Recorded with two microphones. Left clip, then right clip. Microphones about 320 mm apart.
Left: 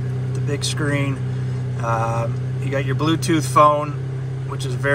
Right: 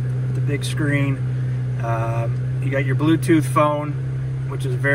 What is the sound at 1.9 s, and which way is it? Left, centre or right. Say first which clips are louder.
Mantra: left 4 dB; centre.